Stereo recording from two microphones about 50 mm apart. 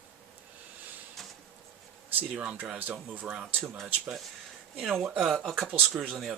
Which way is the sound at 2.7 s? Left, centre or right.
Right.